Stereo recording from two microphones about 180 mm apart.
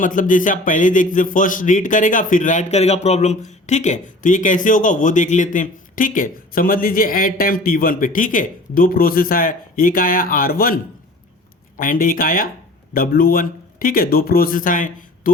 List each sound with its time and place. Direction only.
0.0 s a man's voice: 50° left (ahead or behind)
11.8 s a man's voice: 50° left (ahead or behind)